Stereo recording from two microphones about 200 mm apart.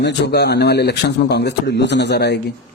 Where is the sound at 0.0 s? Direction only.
55° left (ahead or behind).